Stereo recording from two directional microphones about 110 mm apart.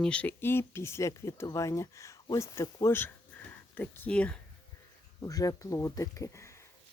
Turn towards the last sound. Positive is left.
turn(degrees=25)  # may be behind; listen again after turning